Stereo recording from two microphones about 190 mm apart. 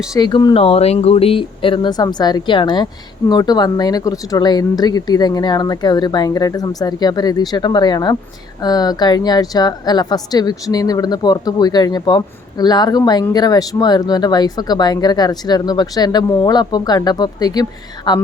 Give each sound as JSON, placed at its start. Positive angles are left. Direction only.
{"t": 0.1, "sound": "speech", "side_deg": 20}